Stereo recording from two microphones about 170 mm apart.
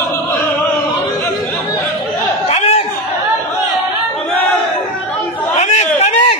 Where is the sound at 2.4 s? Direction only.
35° left (ahead or behind).